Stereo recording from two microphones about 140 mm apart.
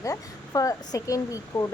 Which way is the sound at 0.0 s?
25° left (ahead or behind).